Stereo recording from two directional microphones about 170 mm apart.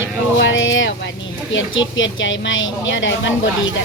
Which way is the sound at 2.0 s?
90° left.